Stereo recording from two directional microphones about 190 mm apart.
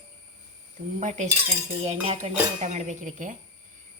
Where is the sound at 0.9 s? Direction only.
40° right (ahead or behind).